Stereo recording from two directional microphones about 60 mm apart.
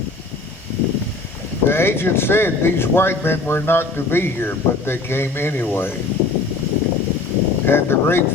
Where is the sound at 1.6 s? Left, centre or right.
Left.